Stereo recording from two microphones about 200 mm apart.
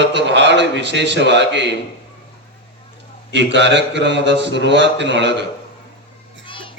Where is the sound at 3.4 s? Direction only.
60° right (ahead or behind).